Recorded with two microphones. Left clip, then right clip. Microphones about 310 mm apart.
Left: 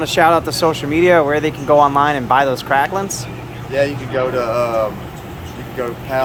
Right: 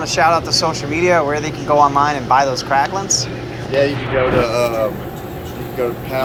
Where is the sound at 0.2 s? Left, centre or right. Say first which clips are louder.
Left 1 dB; left.